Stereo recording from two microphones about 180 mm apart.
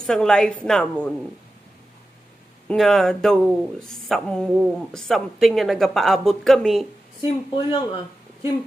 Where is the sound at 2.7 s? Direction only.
Centre (ahead or behind).